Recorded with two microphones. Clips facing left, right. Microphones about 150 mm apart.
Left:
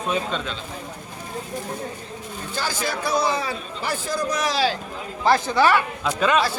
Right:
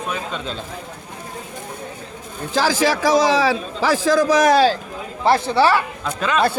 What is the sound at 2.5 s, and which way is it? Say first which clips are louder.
A man's voice: right 9 dB; 90° right.